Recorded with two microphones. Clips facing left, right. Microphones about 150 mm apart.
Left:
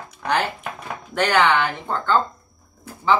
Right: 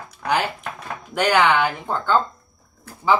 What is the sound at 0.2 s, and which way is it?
Speech, 10° right (ahead or behind).